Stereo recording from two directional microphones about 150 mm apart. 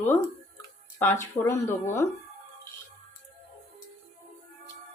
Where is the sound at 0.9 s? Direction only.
15° left (ahead or behind).